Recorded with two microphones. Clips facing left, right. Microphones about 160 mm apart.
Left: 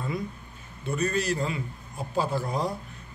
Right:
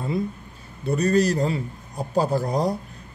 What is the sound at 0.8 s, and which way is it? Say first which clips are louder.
Speech: right 7 dB; 35° right (ahead or behind).